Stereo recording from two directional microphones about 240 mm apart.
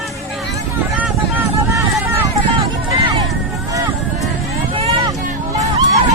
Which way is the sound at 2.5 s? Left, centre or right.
Centre.